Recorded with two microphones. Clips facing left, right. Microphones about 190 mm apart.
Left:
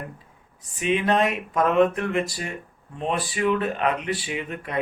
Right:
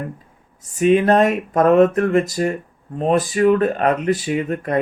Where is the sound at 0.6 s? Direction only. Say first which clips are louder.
Right 9 dB; 45° right (ahead or behind).